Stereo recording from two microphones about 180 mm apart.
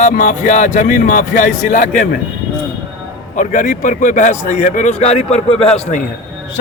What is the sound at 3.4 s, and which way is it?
A man's voice, 45° left (ahead or behind).